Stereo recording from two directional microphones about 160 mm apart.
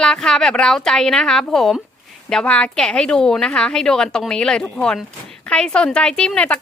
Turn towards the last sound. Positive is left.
turn(degrees=5)  # may be behind; listen again after turning